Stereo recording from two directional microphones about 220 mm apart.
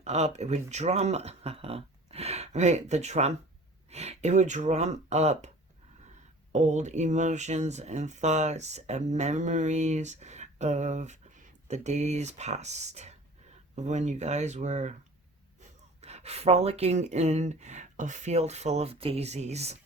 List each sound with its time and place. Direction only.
0.0 s speech: 30° right (ahead or behind)
6.5 s speech: 30° right (ahead or behind)